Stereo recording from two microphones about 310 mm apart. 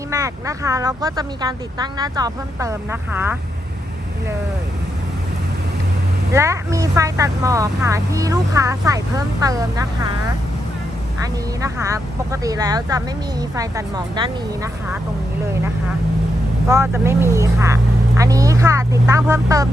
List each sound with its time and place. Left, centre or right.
0.1 s speech: centre
6.3 s speech: centre
11.2 s speech: centre
16.6 s speech: centre